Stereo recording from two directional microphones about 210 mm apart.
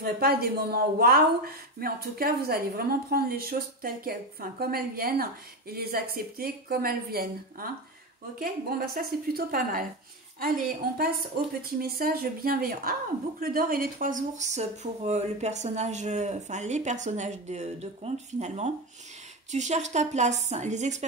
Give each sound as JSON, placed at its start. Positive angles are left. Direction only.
{"t": 0.0, "sound": "speech", "side_deg": -45}